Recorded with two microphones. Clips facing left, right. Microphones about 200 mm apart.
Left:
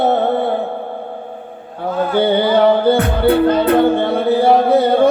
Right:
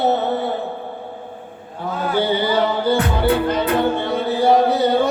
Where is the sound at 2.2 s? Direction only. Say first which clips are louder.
Left 5 dB; 55° left (ahead or behind).